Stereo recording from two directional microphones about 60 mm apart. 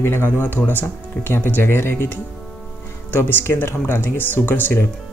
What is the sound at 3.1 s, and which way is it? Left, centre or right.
Speech, left.